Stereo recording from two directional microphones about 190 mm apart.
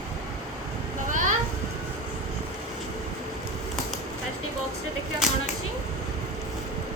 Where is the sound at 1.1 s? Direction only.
45° right (ahead or behind).